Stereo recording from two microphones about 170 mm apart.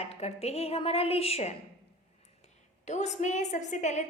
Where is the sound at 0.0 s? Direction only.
40° left (ahead or behind).